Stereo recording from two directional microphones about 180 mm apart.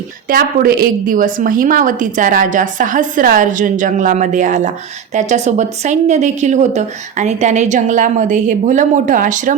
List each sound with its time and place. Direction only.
0.3 s a woman's voice: 55° right (ahead or behind)